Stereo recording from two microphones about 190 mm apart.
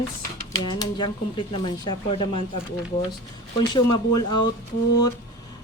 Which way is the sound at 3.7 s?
20° left (ahead or behind).